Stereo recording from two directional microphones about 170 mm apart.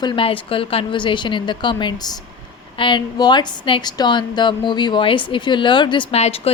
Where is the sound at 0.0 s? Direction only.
30° left (ahead or behind).